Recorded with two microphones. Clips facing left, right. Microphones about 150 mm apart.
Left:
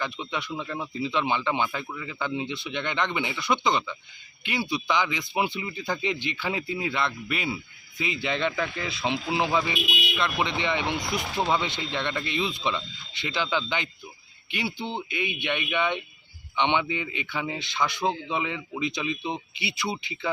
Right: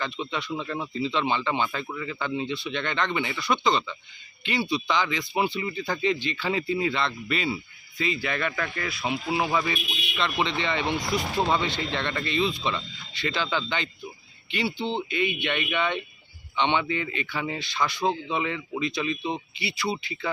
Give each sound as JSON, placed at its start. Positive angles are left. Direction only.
{"t": 0.0, "sound": "speech", "side_deg": 15}